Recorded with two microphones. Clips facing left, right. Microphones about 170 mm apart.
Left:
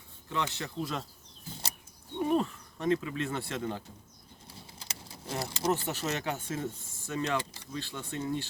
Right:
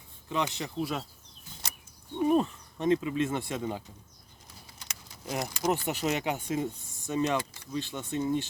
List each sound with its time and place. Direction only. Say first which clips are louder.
0.3 s speech: right 3 dB; 15° right (ahead or behind)
2.3 s speech: right 2 dB; 20° right (ahead or behind)
4.8 s keys jangling: left 1 dB; 30° left (ahead or behind)
5.7 s speech: right 3 dB; 15° right (ahead or behind)